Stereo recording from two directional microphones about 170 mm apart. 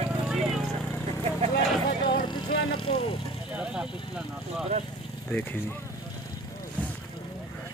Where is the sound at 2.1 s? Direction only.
25° left (ahead or behind).